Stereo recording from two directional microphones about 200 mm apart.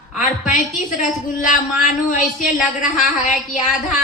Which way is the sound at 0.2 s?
40° left (ahead or behind).